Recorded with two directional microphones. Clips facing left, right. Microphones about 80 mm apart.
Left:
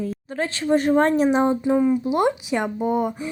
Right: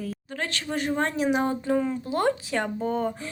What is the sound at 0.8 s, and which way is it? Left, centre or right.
Speech, left.